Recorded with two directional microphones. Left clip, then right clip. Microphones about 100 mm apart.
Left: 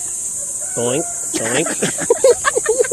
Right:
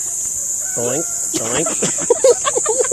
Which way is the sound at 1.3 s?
25° left (ahead or behind).